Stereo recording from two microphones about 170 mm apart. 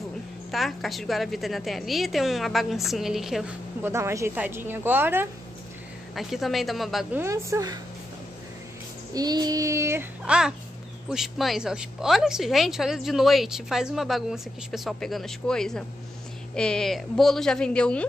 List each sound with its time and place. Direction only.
0.5 s a woman's voice: centre (ahead or behind)
3.8 s a woman's voice: 15° right (ahead or behind)
6.1 s a woman's voice: centre (ahead or behind)
7.2 s a woman's voice: 15° right (ahead or behind)
9.1 s a woman's voice: 25° right (ahead or behind); by 18.0 s 5° left (ahead or behind)